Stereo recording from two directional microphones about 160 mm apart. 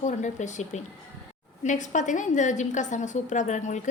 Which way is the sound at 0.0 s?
50° left (ahead or behind).